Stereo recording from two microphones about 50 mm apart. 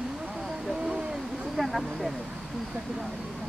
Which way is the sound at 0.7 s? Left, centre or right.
Centre.